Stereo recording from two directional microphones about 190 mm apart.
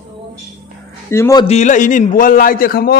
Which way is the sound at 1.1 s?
15° left (ahead or behind).